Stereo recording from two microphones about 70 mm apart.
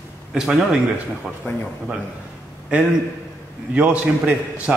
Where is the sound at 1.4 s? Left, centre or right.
Left.